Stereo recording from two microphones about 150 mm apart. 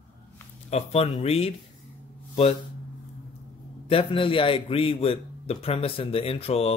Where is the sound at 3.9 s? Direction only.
35° left (ahead or behind).